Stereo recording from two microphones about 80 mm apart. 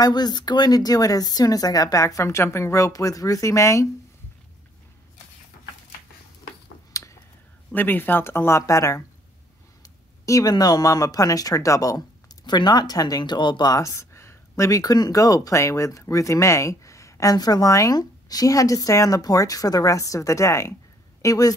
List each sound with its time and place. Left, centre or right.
0.0 s speech: left
6.9 s a sound: left
7.7 s speech: left
10.2 s speech: left
10.5 s speech: left
12.4 s speech: left
13.2 s speech: left
13.7 s a sound: left
14.8 s speech: left
21.2 s speech: left